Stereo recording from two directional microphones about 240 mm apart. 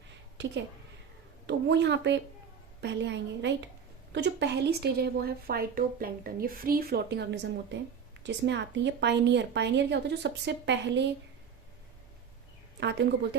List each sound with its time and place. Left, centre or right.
1.5 s a woman's voice: right